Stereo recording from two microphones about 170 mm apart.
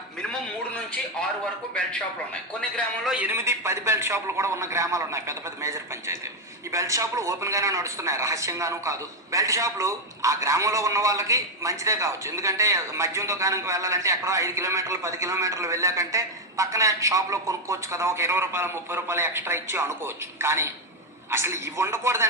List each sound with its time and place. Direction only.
1.7 s a man's voice: 5° left (ahead or behind); by 22.3 s 15° right (ahead or behind)